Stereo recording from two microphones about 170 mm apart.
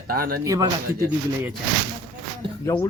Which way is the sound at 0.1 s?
60° right (ahead or behind).